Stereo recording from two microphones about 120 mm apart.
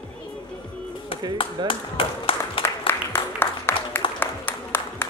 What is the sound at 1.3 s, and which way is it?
Speech, 45° left (ahead or behind).